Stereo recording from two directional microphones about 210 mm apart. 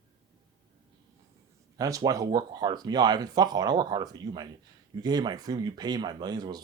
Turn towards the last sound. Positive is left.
turn(degrees=-20)  # may be behind; listen again after turning